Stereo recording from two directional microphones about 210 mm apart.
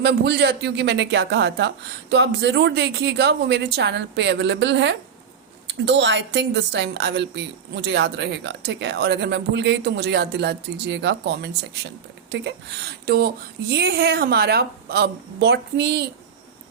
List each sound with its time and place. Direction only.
0.0 s a woman's voice: 50° right (ahead or behind)